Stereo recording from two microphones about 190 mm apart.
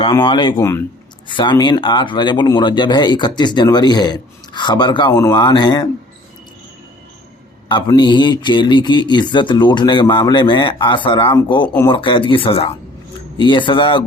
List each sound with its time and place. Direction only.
0.3 s speech: 25° left (ahead or behind)
7.7 s speech: 25° left (ahead or behind)